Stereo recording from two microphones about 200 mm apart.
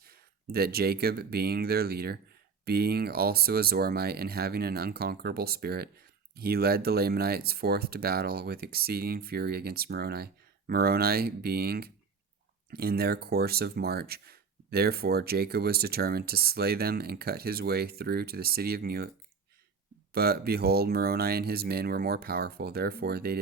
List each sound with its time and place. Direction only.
0.0 s speech: 50° right (ahead or behind)
20.1 s speech: 50° right (ahead or behind)